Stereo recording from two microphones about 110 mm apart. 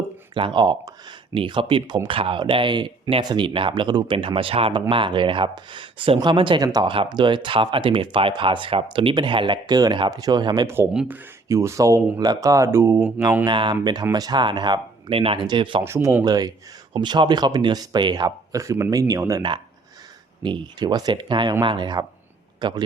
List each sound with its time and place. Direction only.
0.3 s speech: 50° right (ahead or behind)
11.4 s speech: 25° right (ahead or behind)
13.4 s speech: 45° right (ahead or behind)
15.1 s speech: 55° right (ahead or behind)
15.8 s speech: 25° right (ahead or behind)
16.2 s speech: 40° right (ahead or behind)
20.4 s speech: 45° right (ahead or behind)